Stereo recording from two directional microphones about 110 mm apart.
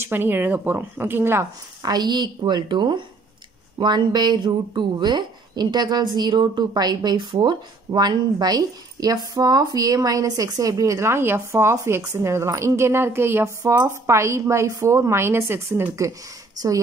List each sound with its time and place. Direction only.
0.0 s speech: 20° right (ahead or behind)
1.8 s a woman's voice: 40° right (ahead or behind); by 16.1 s 20° right (ahead or behind)
16.5 s speech: 30° right (ahead or behind)